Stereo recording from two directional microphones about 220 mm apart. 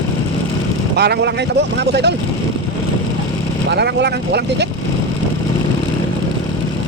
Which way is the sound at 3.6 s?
50° right (ahead or behind).